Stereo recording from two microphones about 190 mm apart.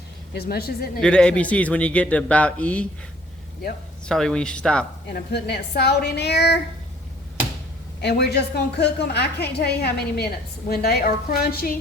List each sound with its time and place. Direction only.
0.3 s a woman's voice: 55° left (ahead or behind)
1.0 s a man's voice: 5° left (ahead or behind)
4.0 s speech: 5° left (ahead or behind)
5.1 s a woman's voice: 60° left (ahead or behind)
8.0 s a woman's voice: 60° left (ahead or behind)